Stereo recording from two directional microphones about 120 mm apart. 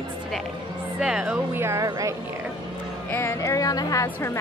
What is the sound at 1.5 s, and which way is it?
Speech, 20° right (ahead or behind).